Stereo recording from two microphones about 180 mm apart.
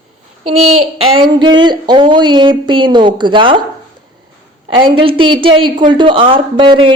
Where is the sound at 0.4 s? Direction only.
35° right (ahead or behind).